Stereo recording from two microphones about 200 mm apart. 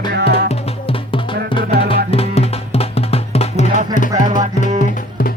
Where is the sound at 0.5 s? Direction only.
30° left (ahead or behind).